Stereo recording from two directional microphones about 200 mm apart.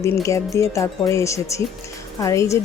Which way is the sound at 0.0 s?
15° left (ahead or behind).